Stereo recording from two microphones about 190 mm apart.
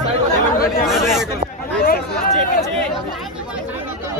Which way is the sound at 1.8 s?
50° left (ahead or behind).